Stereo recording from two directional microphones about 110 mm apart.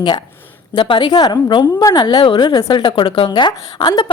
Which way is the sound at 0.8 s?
45° left (ahead or behind).